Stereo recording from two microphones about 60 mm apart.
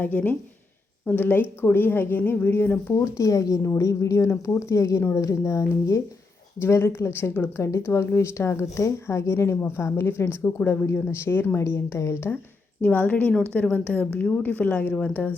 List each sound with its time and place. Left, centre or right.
0.0 s a woman's voice: left
3.0 s speech: left
7.5 s a woman's voice: left
12.8 s speech: left